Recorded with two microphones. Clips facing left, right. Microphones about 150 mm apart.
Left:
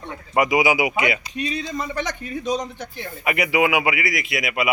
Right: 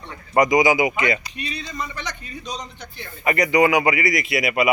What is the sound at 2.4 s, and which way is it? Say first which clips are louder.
Speech: left 9 dB; 50° left (ahead or behind).